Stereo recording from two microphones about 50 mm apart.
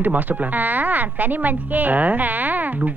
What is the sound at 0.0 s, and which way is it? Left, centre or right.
Speech, right.